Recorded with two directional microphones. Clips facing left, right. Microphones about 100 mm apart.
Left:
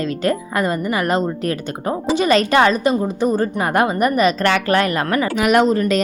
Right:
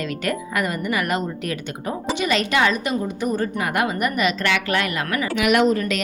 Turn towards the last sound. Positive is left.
turn(degrees=35)  # may be behind; listen again after turning